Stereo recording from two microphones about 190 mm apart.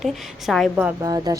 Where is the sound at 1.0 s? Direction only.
20° right (ahead or behind).